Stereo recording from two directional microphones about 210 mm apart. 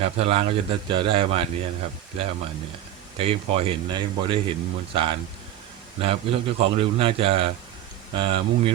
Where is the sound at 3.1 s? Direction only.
25° right (ahead or behind).